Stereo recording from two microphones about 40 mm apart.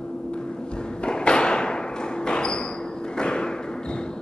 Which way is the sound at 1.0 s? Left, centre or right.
Left.